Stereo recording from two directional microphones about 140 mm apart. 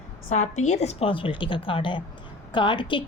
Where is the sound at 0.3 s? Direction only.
55° left (ahead or behind).